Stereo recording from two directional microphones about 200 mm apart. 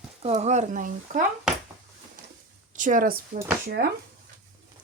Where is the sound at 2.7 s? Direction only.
40° right (ahead or behind).